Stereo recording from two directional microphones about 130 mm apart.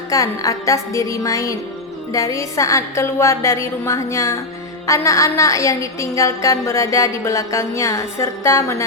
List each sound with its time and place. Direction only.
0.1 s music: 25° left (ahead or behind)